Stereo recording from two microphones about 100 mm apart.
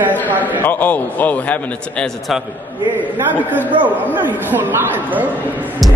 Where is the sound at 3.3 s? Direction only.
20° right (ahead or behind).